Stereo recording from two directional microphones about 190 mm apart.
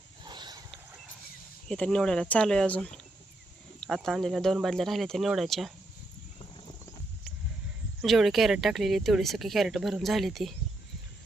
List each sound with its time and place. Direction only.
0.3 s a sound: 20° right (ahead or behind)
1.6 s speech: 5° left (ahead or behind)
8.0 s speech: centre (ahead or behind)